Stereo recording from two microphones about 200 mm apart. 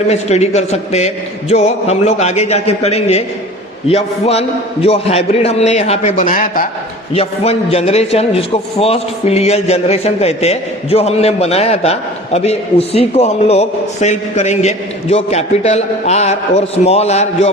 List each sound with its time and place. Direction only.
0.1 s a man's voice: 35° left (ahead or behind)
7.1 s a man's voice: 30° left (ahead or behind)